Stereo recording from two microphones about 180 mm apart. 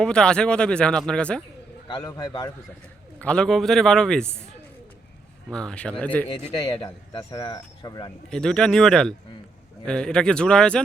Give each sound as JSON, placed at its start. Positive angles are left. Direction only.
{"t": 0.0, "sound": "speech", "side_deg": 5}
{"t": 1.9, "sound": "speech", "side_deg": 20}
{"t": 3.2, "sound": "speech", "side_deg": 5}
{"t": 5.5, "sound": "speech", "side_deg": 5}
{"t": 6.4, "sound": "speech", "side_deg": 30}
{"t": 8.3, "sound": "speech", "side_deg": 5}